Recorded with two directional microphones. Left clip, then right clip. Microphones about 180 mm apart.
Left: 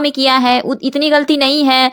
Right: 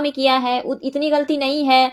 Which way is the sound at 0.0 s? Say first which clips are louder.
Left 5 dB; 40° left (ahead or behind).